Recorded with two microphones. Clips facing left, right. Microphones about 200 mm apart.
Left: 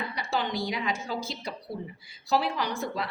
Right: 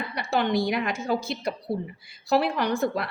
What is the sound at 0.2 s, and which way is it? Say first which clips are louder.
A woman's voice: right 7 dB; 60° right (ahead or behind).